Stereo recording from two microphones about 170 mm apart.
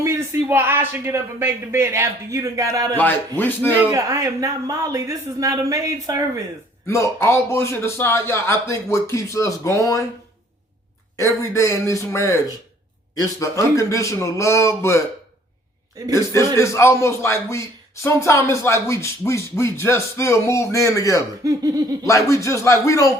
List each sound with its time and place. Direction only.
0.0 s speech: 15° right (ahead or behind)
3.0 s a man's voice: 10° left (ahead or behind)
3.8 s speech: 15° right (ahead or behind)
6.8 s a man's voice: 15° left (ahead or behind)
11.2 s a man's voice: 20° left (ahead or behind)
16.1 s a man's voice: 15° left (ahead or behind)
21.4 s speech: 20° right (ahead or behind)
22.0 s a man's voice: 20° left (ahead or behind)